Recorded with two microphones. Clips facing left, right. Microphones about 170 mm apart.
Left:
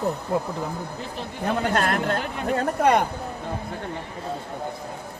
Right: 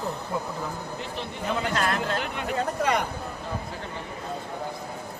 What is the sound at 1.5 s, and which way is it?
Speech, 55° left (ahead or behind).